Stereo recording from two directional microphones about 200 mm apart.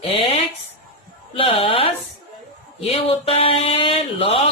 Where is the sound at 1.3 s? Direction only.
30° left (ahead or behind).